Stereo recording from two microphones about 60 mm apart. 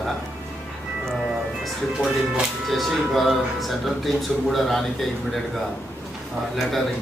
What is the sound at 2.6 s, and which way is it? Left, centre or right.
Speech, centre.